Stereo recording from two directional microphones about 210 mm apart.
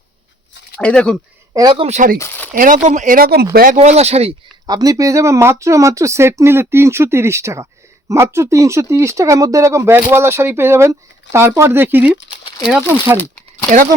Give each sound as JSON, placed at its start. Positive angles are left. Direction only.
{"t": 0.8, "sound": "speech", "side_deg": 5}
{"t": 1.5, "sound": "speech", "side_deg": -20}
{"t": 2.1, "sound": "speech", "side_deg": 10}
{"t": 2.5, "sound": "speech", "side_deg": -40}
{"t": 3.8, "sound": "speech", "side_deg": -30}
{"t": 4.6, "sound": "speech", "side_deg": -20}
{"t": 12.3, "sound": "a sound", "side_deg": 20}
{"t": 13.1, "sound": "a sound", "side_deg": 10}